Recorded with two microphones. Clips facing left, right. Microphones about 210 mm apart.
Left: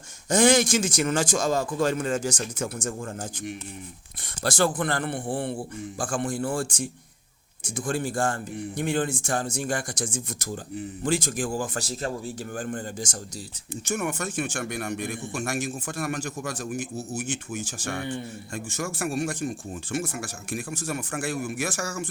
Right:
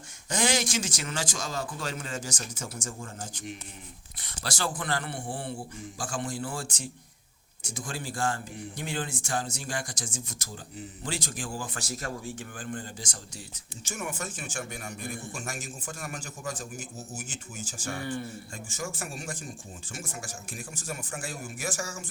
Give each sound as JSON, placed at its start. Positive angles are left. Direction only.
{"t": 0.3, "sound": "a man's voice", "side_deg": 50}
{"t": 11.8, "sound": "speech", "side_deg": 30}
{"t": 12.5, "sound": "a man's voice", "side_deg": 50}
{"t": 13.8, "sound": "a man's voice", "side_deg": 65}
{"t": 18.0, "sound": "a man's voice", "side_deg": 20}
{"t": 18.5, "sound": "a man's voice", "side_deg": 70}